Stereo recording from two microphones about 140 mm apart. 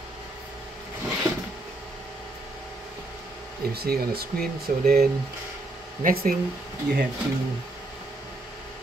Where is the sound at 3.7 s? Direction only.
90° right.